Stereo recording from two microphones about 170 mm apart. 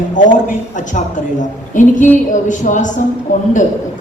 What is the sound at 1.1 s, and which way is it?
Speech, 50° left (ahead or behind).